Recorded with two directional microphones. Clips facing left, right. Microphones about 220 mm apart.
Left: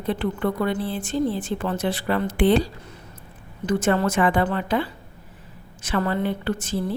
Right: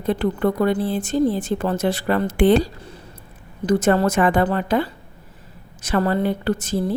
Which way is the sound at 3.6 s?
40° right (ahead or behind).